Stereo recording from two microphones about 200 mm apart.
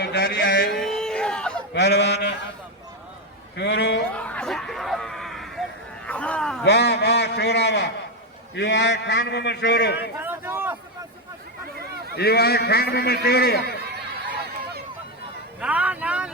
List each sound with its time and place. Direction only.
0.0 s mantra: 55° left (ahead or behind)
0.8 s a sound: centre (ahead or behind)
1.7 s a man's voice: 60° left (ahead or behind)
3.6 s a man's voice: 55° left (ahead or behind)
4.2 s hubbub: 5° left (ahead or behind)
6.1 s a man's voice: 5° left (ahead or behind)
6.7 s a man's voice: 55° left (ahead or behind)
10.2 s a sound: 10° right (ahead or behind)
12.1 s a man's voice: 55° left (ahead or behind)
15.6 s speech: 5° right (ahead or behind)